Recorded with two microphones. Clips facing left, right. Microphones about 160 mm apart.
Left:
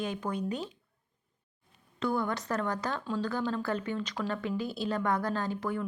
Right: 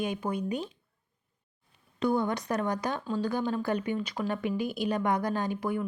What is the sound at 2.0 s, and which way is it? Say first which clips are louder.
Speech: right 3 dB; 15° right (ahead or behind).